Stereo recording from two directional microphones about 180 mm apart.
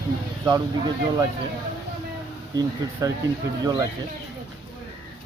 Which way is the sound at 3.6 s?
20° right (ahead or behind).